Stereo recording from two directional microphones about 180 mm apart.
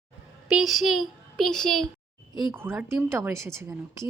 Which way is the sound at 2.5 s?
10° right (ahead or behind).